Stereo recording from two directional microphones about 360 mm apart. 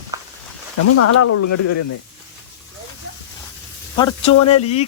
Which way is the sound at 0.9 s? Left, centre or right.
Left.